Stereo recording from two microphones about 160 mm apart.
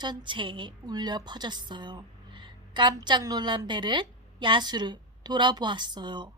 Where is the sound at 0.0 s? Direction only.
30° right (ahead or behind).